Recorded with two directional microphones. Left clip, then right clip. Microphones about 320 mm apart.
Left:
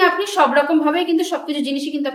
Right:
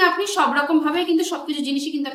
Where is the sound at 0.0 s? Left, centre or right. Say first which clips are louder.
Left 3 dB; centre.